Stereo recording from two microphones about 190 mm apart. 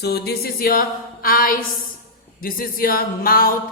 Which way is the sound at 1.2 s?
50° left (ahead or behind).